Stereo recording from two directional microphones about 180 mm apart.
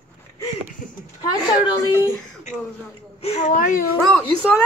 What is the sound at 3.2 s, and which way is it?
Speech, 40° left (ahead or behind).